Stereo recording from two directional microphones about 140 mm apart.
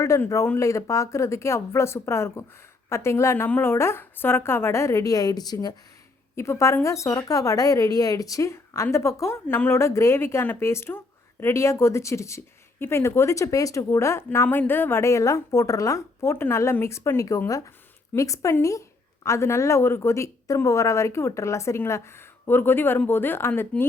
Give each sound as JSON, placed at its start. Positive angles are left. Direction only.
{"t": 0.0, "sound": "a woman's voice", "side_deg": 20}